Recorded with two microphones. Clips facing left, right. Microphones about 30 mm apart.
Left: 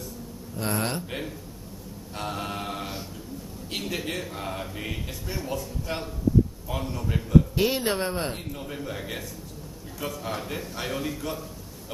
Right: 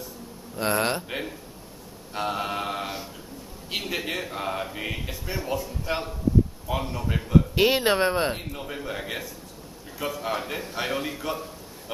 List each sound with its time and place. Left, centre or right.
0.6 s speech: right
2.1 s mantra: centre
3.7 s a man's voice: centre
7.5 s speech: right